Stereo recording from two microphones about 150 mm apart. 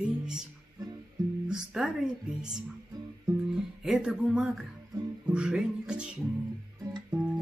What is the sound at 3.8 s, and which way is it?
Music, 5° right (ahead or behind).